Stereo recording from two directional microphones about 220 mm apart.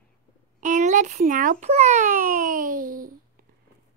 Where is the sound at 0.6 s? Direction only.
35° right (ahead or behind).